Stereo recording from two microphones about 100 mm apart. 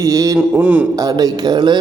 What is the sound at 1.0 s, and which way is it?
Mantra, 40° right (ahead or behind).